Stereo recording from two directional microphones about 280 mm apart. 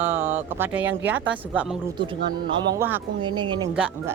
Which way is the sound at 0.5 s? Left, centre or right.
Centre.